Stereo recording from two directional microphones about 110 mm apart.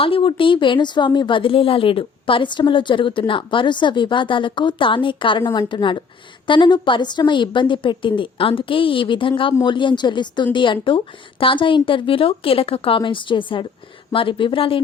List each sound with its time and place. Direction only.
0.0 s speech: 55° left (ahead or behind)